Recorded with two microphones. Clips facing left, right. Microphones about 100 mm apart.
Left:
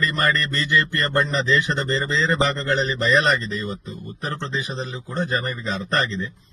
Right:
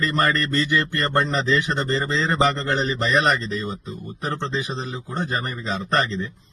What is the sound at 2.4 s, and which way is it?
A man's voice, 25° right (ahead or behind).